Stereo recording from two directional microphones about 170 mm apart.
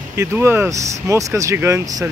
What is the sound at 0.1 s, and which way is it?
Speech, 15° right (ahead or behind).